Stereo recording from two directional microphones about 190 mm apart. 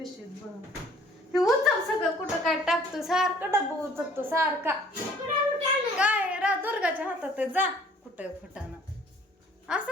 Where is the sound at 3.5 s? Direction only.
10° right (ahead or behind).